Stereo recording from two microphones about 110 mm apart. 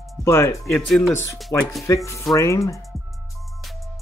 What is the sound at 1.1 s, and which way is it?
Speech, 25° left (ahead or behind).